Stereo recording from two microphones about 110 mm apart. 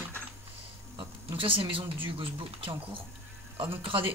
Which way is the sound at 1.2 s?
50° right (ahead or behind).